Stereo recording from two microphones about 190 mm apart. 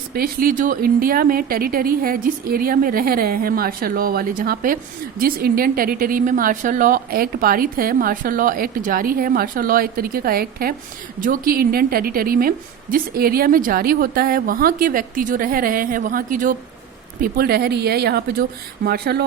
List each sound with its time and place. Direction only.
0.1 s a woman's voice: 50° right (ahead or behind)